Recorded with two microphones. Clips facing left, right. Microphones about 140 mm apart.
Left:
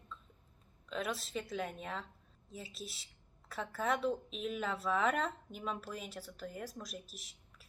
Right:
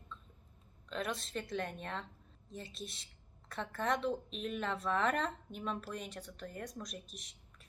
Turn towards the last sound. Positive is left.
turn(degrees=5)  # may be behind; listen again after turning